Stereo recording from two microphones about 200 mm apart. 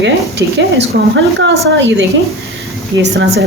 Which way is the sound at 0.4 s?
60° right (ahead or behind).